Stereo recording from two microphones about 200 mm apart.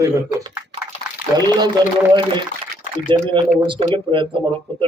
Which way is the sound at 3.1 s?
25° right (ahead or behind).